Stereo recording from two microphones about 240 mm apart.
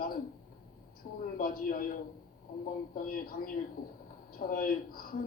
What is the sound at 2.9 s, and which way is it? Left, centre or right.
A man's voice, left.